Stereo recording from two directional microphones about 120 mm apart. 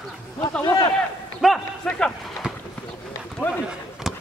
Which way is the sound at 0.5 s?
15° left (ahead or behind).